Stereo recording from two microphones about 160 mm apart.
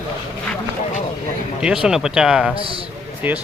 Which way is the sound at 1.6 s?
5° right (ahead or behind).